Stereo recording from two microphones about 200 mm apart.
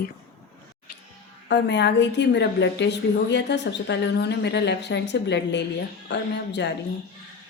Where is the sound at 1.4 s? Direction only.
60° left (ahead or behind).